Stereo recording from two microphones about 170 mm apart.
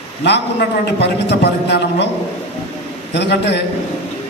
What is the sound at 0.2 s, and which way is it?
A man's voice, 85° left.